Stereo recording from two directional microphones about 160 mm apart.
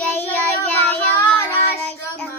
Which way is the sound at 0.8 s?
15° left (ahead or behind).